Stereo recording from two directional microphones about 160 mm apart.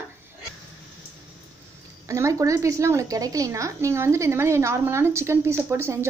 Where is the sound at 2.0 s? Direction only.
20° right (ahead or behind).